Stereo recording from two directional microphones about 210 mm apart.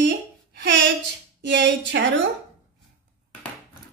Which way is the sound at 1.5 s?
60° right (ahead or behind).